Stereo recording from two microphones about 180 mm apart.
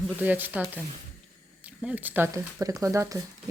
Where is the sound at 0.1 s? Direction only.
10° right (ahead or behind).